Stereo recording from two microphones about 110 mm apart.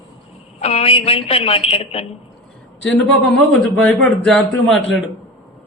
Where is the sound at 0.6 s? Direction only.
70° left (ahead or behind).